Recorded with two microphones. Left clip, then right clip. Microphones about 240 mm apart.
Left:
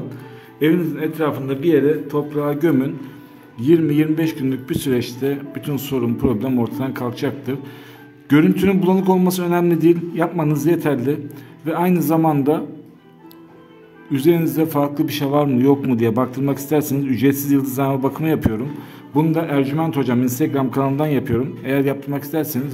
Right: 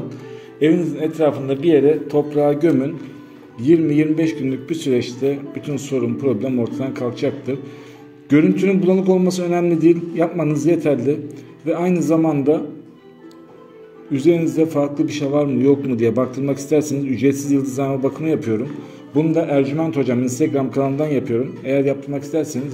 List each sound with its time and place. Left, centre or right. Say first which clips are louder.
0.6 s a man's voice: right 1 dB; centre
14.1 s a man's voice: right 1 dB; left